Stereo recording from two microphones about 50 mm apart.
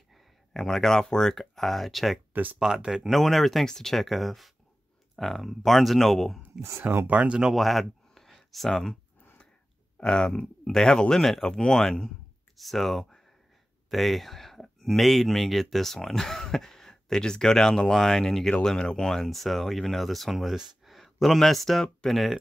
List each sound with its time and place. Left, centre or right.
0.1 s speech: centre
2.6 s speech: centre
3.1 s speech: centre
6.8 s speech: right
7.1 s speech: right
7.5 s a sound: centre
9.9 s speech: centre
20.5 s a sound: centre
22.0 s speech: centre